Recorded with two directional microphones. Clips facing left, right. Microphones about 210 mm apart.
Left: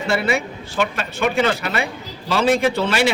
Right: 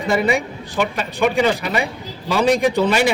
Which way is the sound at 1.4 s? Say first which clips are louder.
Right 2 dB; 15° right (ahead or behind).